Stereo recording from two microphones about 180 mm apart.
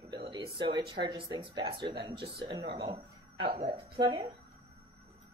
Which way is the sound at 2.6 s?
60° right (ahead or behind).